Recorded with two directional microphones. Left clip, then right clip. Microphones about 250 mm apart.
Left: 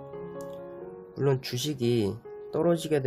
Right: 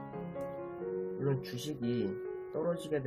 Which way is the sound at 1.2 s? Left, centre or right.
Left.